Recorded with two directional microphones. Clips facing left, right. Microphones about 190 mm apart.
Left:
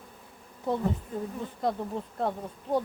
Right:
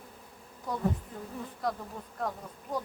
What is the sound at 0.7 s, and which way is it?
Speech, 25° left (ahead or behind).